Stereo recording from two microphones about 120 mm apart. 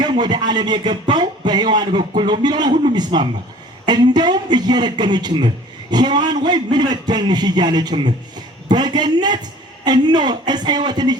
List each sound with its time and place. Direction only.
0.0 s music: 35° right (ahead or behind)